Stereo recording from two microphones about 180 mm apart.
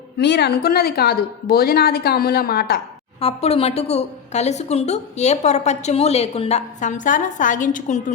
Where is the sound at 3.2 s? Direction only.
35° left (ahead or behind).